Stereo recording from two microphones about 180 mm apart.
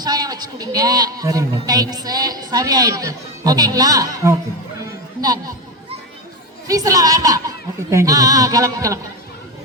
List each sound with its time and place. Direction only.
0.0 s a man's voice: 20° right (ahead or behind)
4.8 s chatter: 20° right (ahead or behind)
6.7 s a man's voice: 20° right (ahead or behind)